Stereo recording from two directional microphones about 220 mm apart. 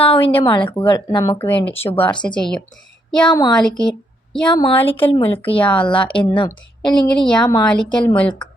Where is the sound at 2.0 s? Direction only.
5° left (ahead or behind).